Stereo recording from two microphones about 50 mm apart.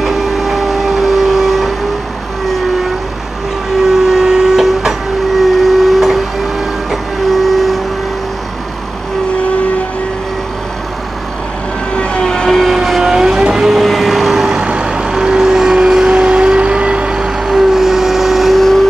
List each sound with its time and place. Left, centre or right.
0.0 s vehicle: centre
3.9 s train: centre
5.4 s steam whistle: centre
6.9 s printer: centre
11.9 s vehicle: left
12.6 s vehicle: centre